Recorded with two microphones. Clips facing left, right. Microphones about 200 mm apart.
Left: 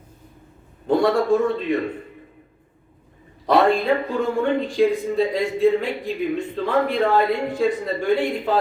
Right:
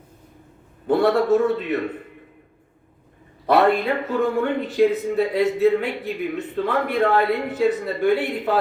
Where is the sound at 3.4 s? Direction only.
5° right (ahead or behind).